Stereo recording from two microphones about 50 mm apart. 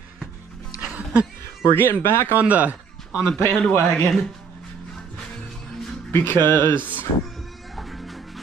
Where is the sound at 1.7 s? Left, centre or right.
Left.